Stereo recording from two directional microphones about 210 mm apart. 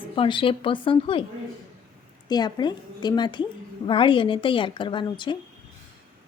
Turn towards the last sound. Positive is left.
turn(degrees=20)  # may be behind; listen again after turning